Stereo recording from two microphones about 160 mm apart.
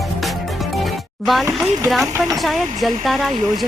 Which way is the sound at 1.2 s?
Centre (ahead or behind).